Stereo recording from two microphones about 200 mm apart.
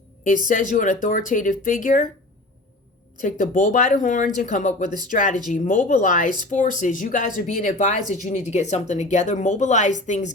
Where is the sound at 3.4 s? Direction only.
40° left (ahead or behind).